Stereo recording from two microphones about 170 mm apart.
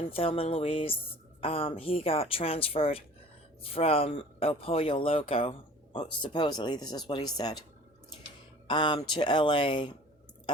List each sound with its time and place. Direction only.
0.1 s speech: 35° left (ahead or behind)
8.6 s speech: 25° left (ahead or behind)